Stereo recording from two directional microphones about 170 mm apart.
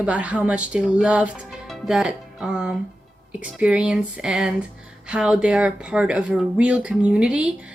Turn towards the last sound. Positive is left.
turn(degrees=-5)  # may be behind; listen again after turning